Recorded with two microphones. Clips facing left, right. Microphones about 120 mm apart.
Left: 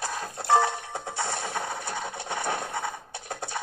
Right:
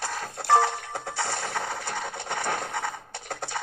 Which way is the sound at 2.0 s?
10° left (ahead or behind).